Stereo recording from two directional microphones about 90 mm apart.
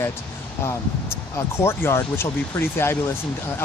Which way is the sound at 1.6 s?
25° left (ahead or behind).